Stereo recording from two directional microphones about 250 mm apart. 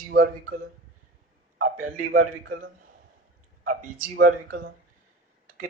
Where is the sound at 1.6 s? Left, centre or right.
Right.